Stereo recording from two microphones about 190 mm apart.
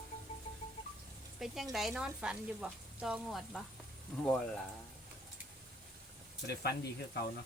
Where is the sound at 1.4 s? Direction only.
Centre (ahead or behind).